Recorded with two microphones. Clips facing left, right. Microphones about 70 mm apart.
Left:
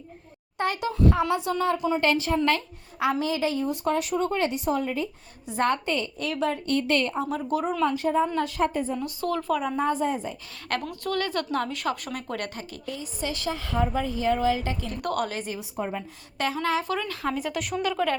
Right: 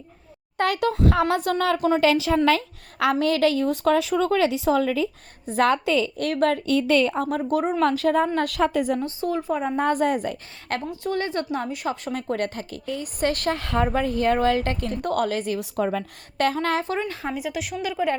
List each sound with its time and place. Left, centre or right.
0.5 s a woman's voice: right
2.1 s a woman's voice: right
3.0 s a woman's voice: right
5.5 s a woman's voice: right
6.1 s a woman's voice: right
7.9 s a woman's voice: right
9.2 s speech: centre
9.6 s a woman's voice: right
9.8 s a woman's voice: right
10.7 s a woman's voice: right
15.0 s a woman's voice: right
16.4 s a woman's voice: right
16.8 s speech: right
17.3 s a woman's voice: centre